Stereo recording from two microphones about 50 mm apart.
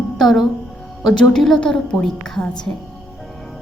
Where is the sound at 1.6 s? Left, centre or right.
Centre.